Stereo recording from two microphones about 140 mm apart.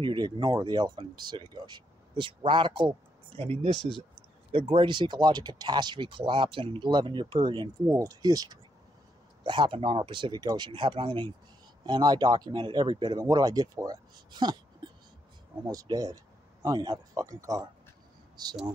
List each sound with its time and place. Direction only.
0.0 s speech: 35° right (ahead or behind)
15.6 s speech: 25° right (ahead or behind)
18.3 s a sound: 30° right (ahead or behind)